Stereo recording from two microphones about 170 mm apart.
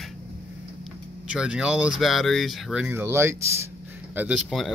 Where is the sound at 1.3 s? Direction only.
5° right (ahead or behind).